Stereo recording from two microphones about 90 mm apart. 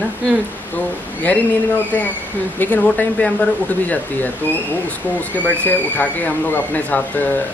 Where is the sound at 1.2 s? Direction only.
20° left (ahead or behind).